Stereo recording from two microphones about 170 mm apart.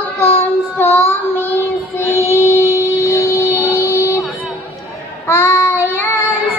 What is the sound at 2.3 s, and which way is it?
Music, 10° left (ahead or behind).